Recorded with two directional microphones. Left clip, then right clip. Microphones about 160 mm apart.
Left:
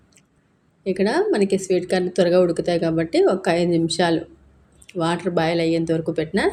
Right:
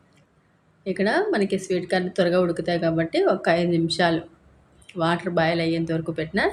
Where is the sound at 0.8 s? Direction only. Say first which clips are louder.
Left 2 dB; 15° left (ahead or behind).